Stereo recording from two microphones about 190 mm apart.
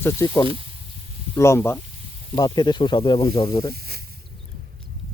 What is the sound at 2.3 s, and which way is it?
Speech, 25° left (ahead or behind).